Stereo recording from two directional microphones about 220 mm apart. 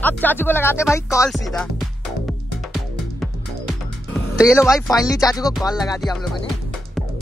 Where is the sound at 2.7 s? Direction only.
Centre (ahead or behind).